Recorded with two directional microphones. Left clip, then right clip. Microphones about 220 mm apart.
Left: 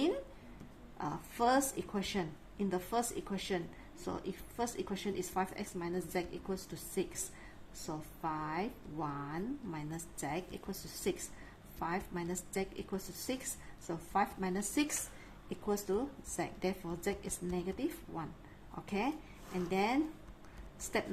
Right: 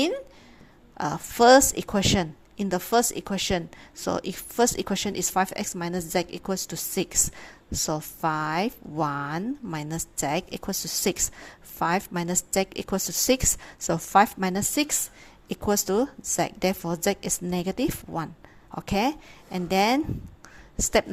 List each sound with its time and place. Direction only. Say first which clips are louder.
0.9 s a woman's voice: right 14 dB; 45° right (ahead or behind)